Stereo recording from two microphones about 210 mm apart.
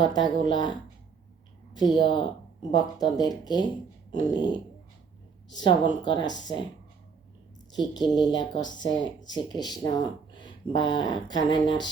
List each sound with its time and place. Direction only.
0.0 s speech: 20° left (ahead or behind)
1.7 s speech: 20° left (ahead or behind)
5.5 s speech: 20° left (ahead or behind)
8.1 s speech: 20° left (ahead or behind)
8.6 s speech: 65° left (ahead or behind)
8.9 s speech: 20° left (ahead or behind)